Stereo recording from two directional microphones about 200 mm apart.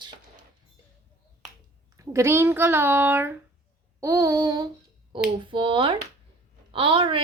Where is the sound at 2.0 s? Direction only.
15° right (ahead or behind).